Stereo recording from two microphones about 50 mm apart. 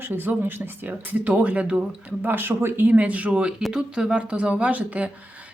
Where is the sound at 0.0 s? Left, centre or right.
Right.